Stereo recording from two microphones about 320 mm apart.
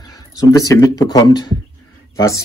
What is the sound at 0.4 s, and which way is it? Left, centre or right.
Speech, centre.